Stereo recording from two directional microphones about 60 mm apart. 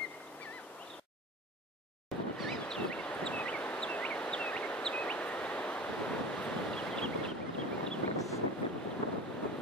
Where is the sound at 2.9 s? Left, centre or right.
Centre.